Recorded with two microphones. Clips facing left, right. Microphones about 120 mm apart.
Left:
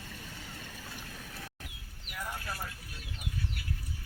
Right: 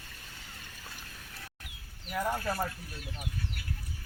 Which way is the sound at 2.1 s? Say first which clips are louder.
Right 9 dB; 50° right (ahead or behind).